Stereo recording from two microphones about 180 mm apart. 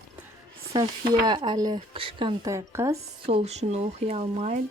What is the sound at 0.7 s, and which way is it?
Speech, 25° right (ahead or behind).